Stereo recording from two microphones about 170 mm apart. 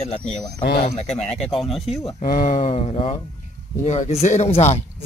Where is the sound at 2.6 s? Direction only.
35° left (ahead or behind).